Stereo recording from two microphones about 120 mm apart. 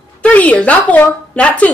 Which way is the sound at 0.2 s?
10° left (ahead or behind).